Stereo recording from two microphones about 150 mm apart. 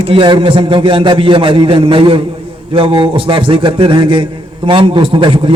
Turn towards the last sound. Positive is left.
turn(degrees=-35)  # may be behind; listen again after turning